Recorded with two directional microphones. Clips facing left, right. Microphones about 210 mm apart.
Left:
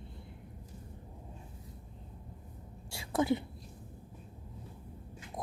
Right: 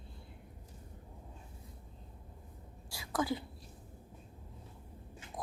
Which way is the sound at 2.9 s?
25° left (ahead or behind).